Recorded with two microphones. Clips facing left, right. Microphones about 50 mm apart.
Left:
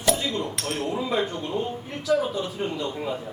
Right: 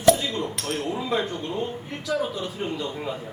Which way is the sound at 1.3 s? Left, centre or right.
Centre.